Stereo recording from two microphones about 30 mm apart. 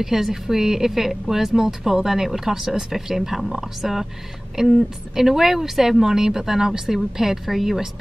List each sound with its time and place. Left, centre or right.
0.0 s speech: centre
4.6 s speech: centre